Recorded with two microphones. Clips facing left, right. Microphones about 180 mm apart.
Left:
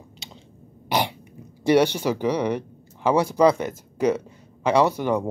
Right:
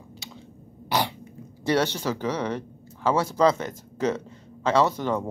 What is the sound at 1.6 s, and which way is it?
Speech, 15° left (ahead or behind).